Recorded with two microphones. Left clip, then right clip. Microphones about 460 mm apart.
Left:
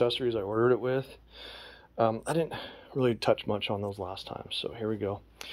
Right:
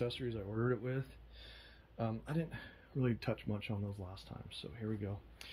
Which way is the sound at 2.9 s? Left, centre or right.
Left.